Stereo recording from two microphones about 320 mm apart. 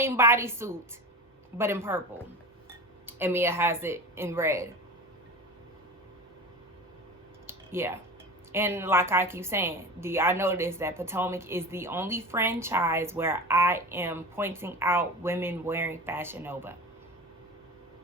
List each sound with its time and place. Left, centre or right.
0.0 s a woman's voice: centre
3.1 s a woman's voice: centre
7.4 s a sound: centre
8.5 s a woman's voice: centre